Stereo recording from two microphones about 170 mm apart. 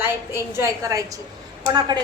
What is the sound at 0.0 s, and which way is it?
A woman's voice, 15° right (ahead or behind).